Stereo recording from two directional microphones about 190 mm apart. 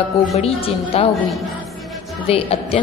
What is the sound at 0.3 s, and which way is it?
Speech, 30° left (ahead or behind).